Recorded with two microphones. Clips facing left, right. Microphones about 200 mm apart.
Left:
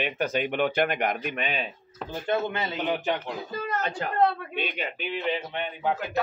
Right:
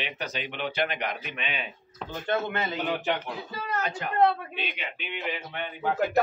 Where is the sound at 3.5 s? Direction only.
40° left (ahead or behind).